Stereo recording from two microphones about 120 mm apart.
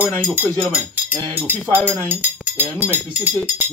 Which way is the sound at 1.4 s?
15° right (ahead or behind).